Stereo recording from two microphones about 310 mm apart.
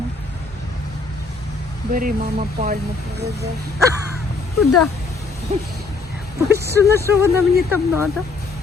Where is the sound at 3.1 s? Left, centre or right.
Right.